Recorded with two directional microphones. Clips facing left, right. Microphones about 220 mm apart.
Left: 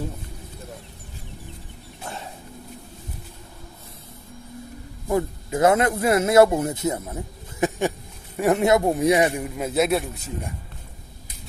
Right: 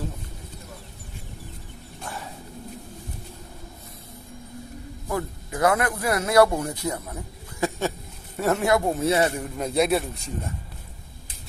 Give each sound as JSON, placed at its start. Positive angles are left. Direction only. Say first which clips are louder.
{"t": 5.0, "sound": "speech", "louder": "left 6 dB", "side_deg": 20}
{"t": 7.6, "sound": "a sound", "louder": "left 3 dB", "side_deg": 15}
{"t": 8.4, "sound": "a man's voice", "louder": "left 3 dB", "side_deg": 20}